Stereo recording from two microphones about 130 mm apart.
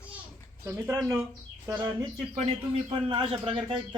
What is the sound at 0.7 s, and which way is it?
Speech, 15° right (ahead or behind).